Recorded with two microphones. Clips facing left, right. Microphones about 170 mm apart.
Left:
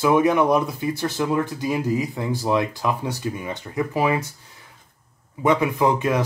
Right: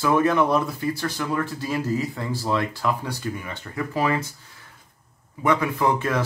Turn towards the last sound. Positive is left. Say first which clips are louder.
# left 3 dB
turn(degrees=15)  # may be behind; listen again after turning